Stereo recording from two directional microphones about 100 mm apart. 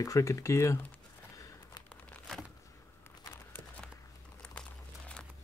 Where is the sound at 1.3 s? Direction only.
35° left (ahead or behind).